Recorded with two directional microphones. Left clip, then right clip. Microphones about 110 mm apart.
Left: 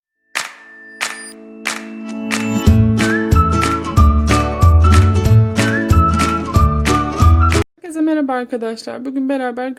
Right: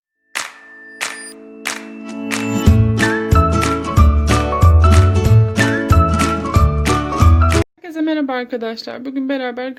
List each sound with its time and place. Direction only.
1.0 s music: centre (ahead or behind)
7.9 s speech: 40° left (ahead or behind)